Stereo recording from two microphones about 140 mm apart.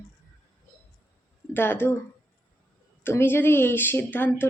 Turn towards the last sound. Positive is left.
turn(degrees=15)  # may be behind; listen again after turning